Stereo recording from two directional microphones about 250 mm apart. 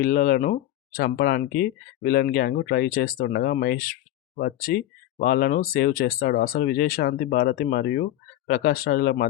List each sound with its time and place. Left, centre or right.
0.0 s speech: left